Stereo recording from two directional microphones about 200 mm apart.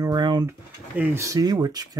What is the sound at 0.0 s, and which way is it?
Speech, 20° right (ahead or behind).